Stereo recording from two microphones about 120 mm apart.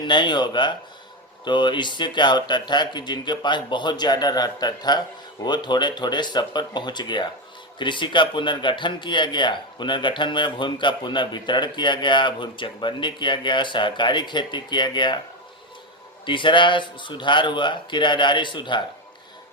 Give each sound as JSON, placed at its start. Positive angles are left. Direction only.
{"t": 0.0, "sound": "a man's voice", "side_deg": 40}
{"t": 16.2, "sound": "a man's voice", "side_deg": 45}